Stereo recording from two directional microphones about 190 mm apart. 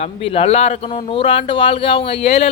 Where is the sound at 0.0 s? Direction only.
30° left (ahead or behind).